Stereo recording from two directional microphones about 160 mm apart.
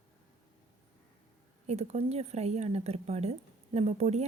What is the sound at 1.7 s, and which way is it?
Speech, 40° right (ahead or behind).